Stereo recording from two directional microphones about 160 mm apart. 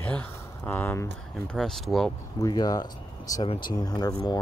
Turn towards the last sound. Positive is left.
turn(degrees=25)  # may be behind; listen again after turning